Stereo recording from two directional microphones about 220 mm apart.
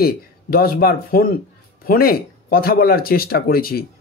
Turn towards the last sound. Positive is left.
turn(degrees=45)  # may be behind; listen again after turning